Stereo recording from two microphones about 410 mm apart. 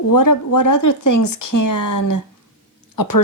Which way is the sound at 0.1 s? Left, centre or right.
Left.